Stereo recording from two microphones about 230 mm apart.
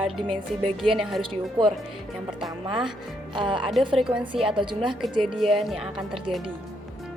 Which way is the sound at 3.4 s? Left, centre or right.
Right.